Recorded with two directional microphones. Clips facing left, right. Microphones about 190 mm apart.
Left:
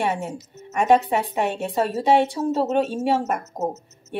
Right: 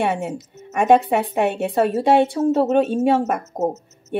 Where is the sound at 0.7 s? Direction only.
55° right (ahead or behind).